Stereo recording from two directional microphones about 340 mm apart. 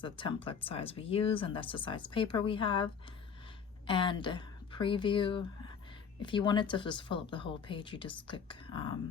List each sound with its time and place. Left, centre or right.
0.0 s speech: centre